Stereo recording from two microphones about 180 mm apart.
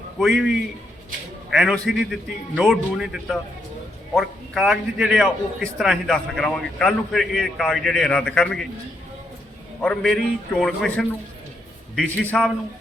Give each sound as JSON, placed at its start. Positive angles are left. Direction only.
{"t": 0.2, "sound": "a man's voice", "side_deg": -5}
{"t": 9.8, "sound": "a man's voice", "side_deg": 0}